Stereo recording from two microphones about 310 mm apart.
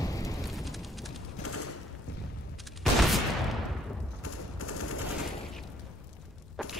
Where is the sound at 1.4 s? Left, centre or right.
Left.